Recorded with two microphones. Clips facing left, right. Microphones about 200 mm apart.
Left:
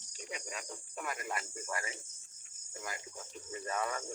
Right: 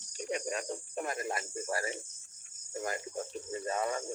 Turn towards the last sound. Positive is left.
turn(degrees=-30)  # may be behind; listen again after turning